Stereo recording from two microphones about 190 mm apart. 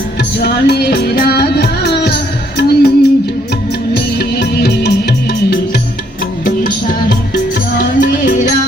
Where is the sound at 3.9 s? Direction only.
55° left (ahead or behind).